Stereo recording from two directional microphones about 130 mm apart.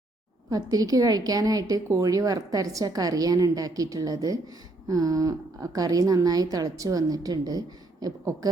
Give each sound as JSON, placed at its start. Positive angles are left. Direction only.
{"t": 0.5, "sound": "a woman's voice", "side_deg": -30}